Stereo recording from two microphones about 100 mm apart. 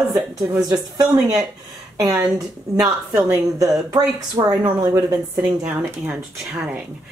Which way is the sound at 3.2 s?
30° right (ahead or behind).